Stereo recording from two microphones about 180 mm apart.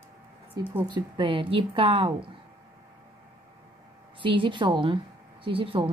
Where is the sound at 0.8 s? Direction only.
25° right (ahead or behind).